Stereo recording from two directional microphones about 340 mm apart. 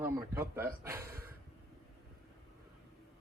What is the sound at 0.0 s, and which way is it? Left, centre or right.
A man's voice, centre.